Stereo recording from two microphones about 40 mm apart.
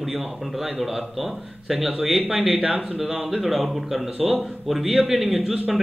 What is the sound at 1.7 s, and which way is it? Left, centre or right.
A man's voice, centre.